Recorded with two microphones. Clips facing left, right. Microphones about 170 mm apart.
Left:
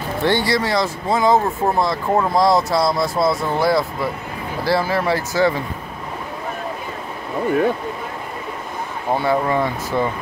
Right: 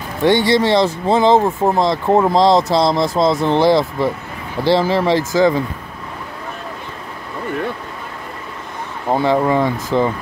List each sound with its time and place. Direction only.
0.2 s speech: 20° right (ahead or behind)
9.1 s speech: 20° right (ahead or behind)